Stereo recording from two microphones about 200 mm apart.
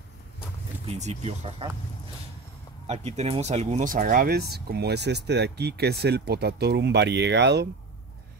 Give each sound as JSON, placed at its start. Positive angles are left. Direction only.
{"t": 0.8, "sound": "speech", "side_deg": -35}
{"t": 2.9, "sound": "speech", "side_deg": -35}